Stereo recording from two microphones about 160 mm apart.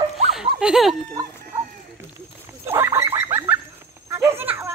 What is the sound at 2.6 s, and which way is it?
Fowl, 15° right (ahead or behind).